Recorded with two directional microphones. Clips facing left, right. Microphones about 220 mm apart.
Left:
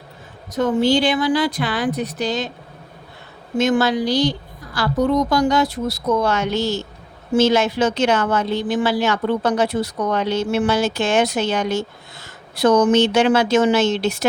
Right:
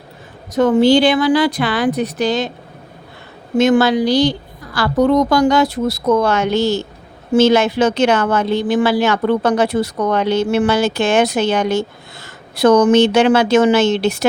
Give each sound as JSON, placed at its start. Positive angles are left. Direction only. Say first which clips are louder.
{"t": 0.5, "sound": "speech", "louder": "right 6 dB", "side_deg": -75}
{"t": 3.6, "sound": "a woman's voice", "louder": "right 5 dB", "side_deg": -90}
{"t": 6.6, "sound": "speech", "louder": "right 5 dB", "side_deg": -90}
{"t": 7.3, "sound": "speech", "louder": "right 4 dB", "side_deg": -55}
{"t": 12.5, "sound": "speech", "louder": "right 4 dB", "side_deg": -75}